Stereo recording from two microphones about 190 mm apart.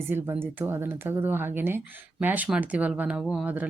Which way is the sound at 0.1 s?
10° right (ahead or behind).